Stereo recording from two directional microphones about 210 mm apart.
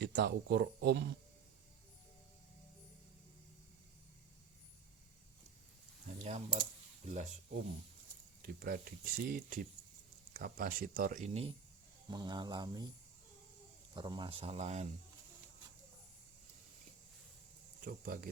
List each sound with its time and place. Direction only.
0.0 s speech: 50° right (ahead or behind)
6.2 s speech: 30° right (ahead or behind)
8.4 s speech: 45° right (ahead or behind)
12.1 s speech: 20° right (ahead or behind)
13.9 s speech: 25° right (ahead or behind)
17.8 s speech: 45° right (ahead or behind)